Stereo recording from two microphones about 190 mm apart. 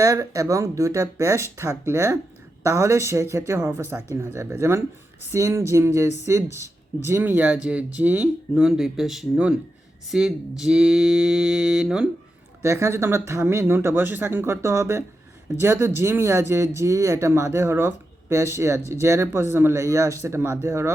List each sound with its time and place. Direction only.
0.0 s speech: 15° right (ahead or behind)
12.6 s speech: 15° right (ahead or behind)